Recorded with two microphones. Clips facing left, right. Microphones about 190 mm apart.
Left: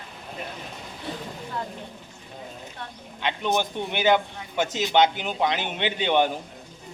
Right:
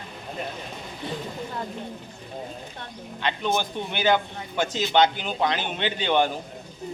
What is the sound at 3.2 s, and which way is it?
A man's voice, 15° left (ahead or behind).